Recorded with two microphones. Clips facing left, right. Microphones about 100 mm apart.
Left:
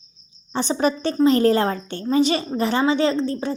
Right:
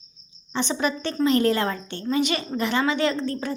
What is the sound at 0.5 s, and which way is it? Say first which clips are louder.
A woman's voice: left 4 dB; 35° left (ahead or behind).